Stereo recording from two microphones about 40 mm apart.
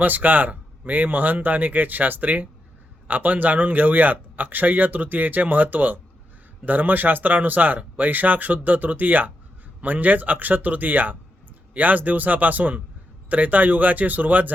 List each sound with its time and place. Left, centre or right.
0.0 s speech: right